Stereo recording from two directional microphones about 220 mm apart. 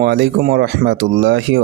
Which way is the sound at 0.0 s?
45° right (ahead or behind).